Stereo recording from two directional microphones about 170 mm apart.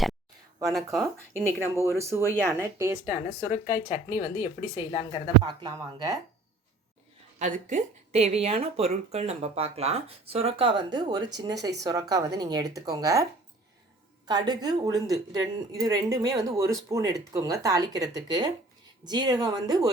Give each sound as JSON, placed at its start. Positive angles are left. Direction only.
{"t": 0.9, "sound": "speech", "side_deg": -15}
{"t": 3.5, "sound": "speech", "side_deg": 40}
{"t": 5.4, "sound": "speech", "side_deg": -25}
{"t": 7.3, "sound": "speech", "side_deg": -45}
{"t": 14.3, "sound": "speech", "side_deg": -25}